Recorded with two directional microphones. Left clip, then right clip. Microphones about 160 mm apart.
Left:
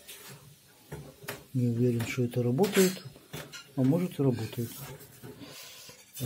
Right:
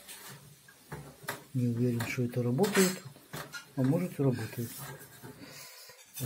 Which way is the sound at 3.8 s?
25° left (ahead or behind).